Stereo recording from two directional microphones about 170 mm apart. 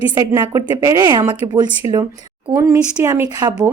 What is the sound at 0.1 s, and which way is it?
A woman's voice, 25° right (ahead or behind).